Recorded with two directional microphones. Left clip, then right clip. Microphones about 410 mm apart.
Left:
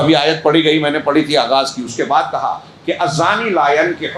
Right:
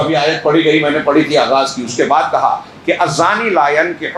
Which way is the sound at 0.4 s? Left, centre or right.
Centre.